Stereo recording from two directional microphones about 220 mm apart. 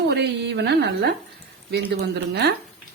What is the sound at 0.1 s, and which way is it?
A woman's voice, 50° right (ahead or behind).